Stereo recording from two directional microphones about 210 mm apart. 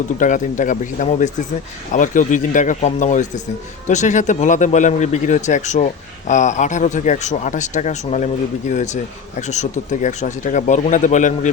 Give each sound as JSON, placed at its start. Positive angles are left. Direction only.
{"t": 0.2, "sound": "speech", "side_deg": 35}